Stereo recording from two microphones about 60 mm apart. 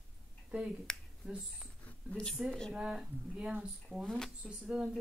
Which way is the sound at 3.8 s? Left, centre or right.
Centre.